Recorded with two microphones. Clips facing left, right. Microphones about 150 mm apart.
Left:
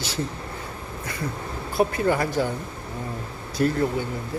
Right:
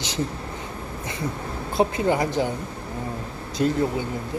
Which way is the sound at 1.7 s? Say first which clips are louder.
Even; 20° right (ahead or behind).